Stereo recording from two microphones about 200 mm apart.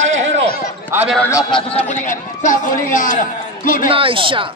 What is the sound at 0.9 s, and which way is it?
Speech, 5° right (ahead or behind).